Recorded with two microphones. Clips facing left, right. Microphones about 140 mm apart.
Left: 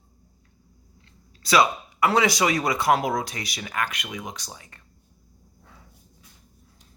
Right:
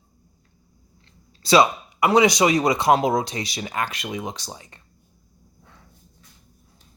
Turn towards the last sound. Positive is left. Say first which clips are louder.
# even
turn(degrees=5)  # may be behind; listen again after turning